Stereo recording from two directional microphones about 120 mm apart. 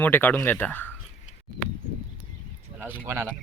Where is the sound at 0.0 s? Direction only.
15° left (ahead or behind).